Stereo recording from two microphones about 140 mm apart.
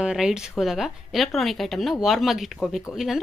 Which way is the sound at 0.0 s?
5° right (ahead or behind).